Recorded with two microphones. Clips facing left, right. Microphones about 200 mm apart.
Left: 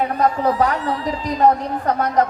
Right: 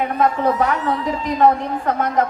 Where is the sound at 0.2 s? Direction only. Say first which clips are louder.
Right 1 dB; 35° left (ahead or behind).